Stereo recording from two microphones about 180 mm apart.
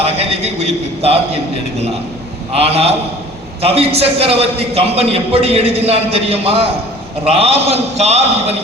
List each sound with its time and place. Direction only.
0.0 s a man's voice: 35° right (ahead or behind)
2.5 s a man's voice: 35° right (ahead or behind)